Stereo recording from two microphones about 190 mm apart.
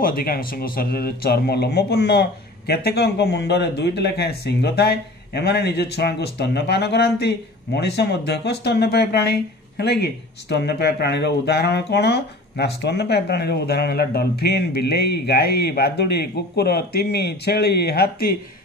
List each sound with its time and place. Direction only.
0.0 s speech: 50° left (ahead or behind)